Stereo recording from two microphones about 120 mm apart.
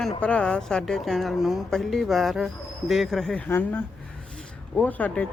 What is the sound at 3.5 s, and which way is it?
Speech, 15° left (ahead or behind).